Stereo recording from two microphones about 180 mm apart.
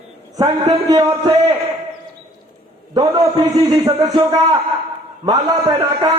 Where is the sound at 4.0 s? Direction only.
20° right (ahead or behind).